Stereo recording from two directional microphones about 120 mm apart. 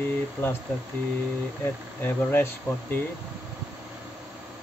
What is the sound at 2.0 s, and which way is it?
Speech, 15° left (ahead or behind).